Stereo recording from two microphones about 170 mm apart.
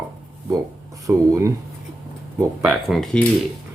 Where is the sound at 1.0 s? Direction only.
15° right (ahead or behind); by 3.2 s 5° left (ahead or behind).